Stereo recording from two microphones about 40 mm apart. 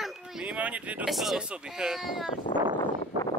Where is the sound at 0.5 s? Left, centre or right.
Right.